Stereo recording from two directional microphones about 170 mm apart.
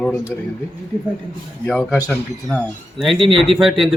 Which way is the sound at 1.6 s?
5° left (ahead or behind).